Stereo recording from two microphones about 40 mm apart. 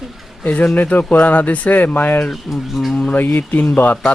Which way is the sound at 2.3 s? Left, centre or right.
Centre.